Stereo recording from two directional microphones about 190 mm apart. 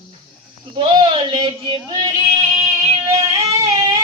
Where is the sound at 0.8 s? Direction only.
30° right (ahead or behind).